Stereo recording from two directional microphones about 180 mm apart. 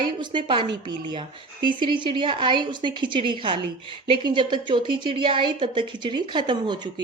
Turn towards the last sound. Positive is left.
turn(degrees=-25)  # may be behind; listen again after turning